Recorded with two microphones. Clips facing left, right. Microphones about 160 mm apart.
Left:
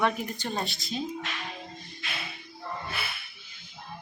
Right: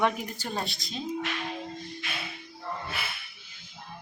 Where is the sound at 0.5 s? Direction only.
Centre (ahead or behind).